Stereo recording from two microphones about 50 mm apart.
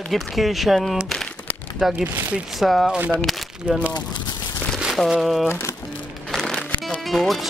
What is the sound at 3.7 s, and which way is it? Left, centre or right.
Speech, centre.